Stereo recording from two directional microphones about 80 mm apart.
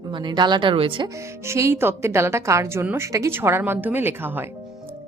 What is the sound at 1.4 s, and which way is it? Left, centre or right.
A woman's voice, right.